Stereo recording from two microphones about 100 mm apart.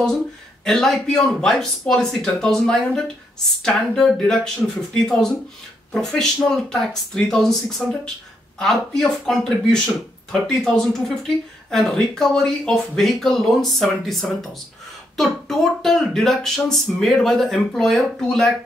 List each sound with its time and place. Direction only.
0.7 s speech: 5° left (ahead or behind)